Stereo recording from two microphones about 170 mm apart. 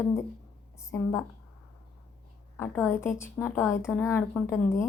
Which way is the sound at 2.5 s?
15° left (ahead or behind).